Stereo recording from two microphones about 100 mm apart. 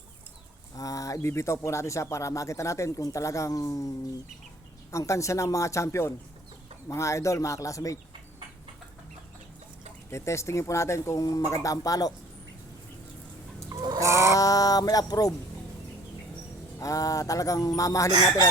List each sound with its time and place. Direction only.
0.8 s speech: 35° left (ahead or behind)
4.9 s speech: 30° left (ahead or behind)
10.1 s speech: 30° left (ahead or behind)
13.7 s chicken: 30° right (ahead or behind)
14.3 s speech: 35° left (ahead or behind)
16.8 s speech: 35° left (ahead or behind)